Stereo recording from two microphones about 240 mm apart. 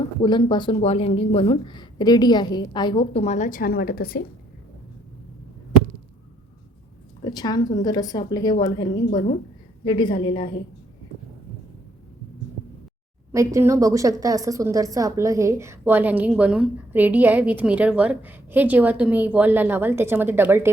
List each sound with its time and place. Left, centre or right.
0.0 s speech: centre; by 4.2 s left
7.3 s a woman's voice: centre
13.3 s a woman's voice: centre